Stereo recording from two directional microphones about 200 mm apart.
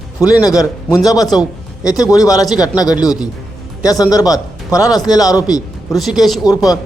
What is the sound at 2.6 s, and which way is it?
Speech, 20° left (ahead or behind).